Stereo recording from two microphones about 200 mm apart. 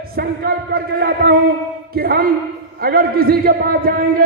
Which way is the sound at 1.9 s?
50° right (ahead or behind).